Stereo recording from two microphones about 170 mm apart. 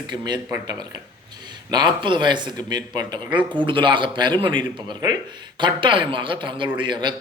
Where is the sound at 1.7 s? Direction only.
25° right (ahead or behind).